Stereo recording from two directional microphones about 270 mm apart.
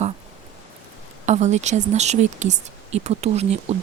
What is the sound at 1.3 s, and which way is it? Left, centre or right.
Speech, right.